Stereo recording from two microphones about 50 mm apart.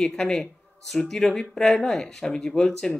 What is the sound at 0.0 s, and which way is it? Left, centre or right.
Speech, centre.